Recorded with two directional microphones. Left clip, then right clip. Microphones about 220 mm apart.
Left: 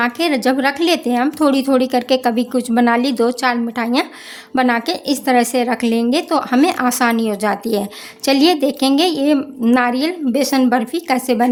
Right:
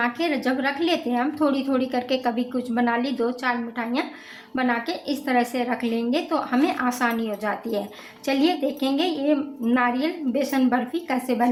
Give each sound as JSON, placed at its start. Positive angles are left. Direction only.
{"t": 0.0, "sound": "a woman's voice", "side_deg": 55}